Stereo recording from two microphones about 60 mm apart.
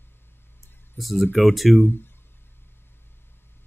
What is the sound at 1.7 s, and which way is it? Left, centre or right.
Speech, left.